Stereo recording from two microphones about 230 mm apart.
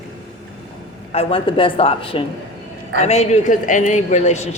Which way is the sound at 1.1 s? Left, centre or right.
Left.